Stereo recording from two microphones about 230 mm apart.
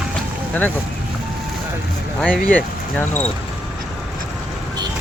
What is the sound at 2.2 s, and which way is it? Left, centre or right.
Speech, centre.